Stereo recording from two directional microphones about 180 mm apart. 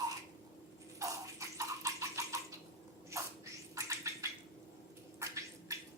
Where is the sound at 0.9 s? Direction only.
15° right (ahead or behind).